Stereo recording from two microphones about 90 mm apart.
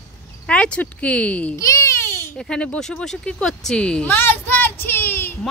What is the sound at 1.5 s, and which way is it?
Baby cry, 35° left (ahead or behind).